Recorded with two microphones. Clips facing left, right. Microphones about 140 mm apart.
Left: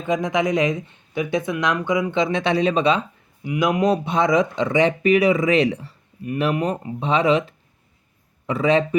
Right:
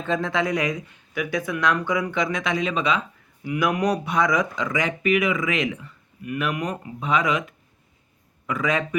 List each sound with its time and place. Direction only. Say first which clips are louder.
0.0 s speech: left 3 dB; 15° left (ahead or behind); by 3.0 s 35° left (ahead or behind)
3.4 s speech: left 3 dB; 20° left (ahead or behind)